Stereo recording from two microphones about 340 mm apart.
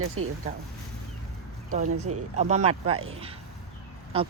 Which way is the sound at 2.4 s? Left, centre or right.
Centre.